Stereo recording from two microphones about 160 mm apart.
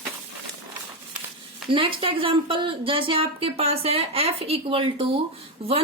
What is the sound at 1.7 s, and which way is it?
A woman's voice, 35° right (ahead or behind).